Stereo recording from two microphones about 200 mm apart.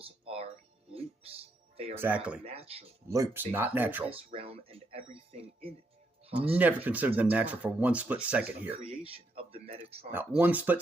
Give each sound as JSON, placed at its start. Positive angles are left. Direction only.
{"t": 0.0, "sound": "music", "side_deg": -30}
{"t": 0.9, "sound": "speech", "side_deg": -30}
{"t": 2.0, "sound": "speech", "side_deg": -10}
{"t": 2.5, "sound": "speech", "side_deg": -30}
{"t": 3.1, "sound": "speech", "side_deg": -15}
{"t": 4.1, "sound": "speech", "side_deg": -30}
{"t": 6.5, "sound": "speech", "side_deg": -10}
{"t": 8.7, "sound": "speech", "side_deg": -30}
{"t": 10.1, "sound": "speech", "side_deg": -10}